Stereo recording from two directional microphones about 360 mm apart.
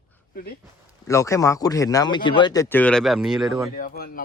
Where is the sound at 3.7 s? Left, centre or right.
Left.